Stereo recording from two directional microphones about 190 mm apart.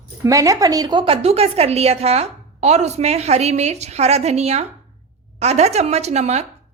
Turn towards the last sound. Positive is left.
turn(degrees=-35)  # may be behind; listen again after turning